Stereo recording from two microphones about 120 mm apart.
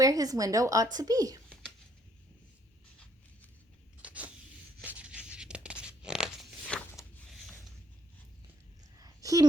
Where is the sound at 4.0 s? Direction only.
10° right (ahead or behind).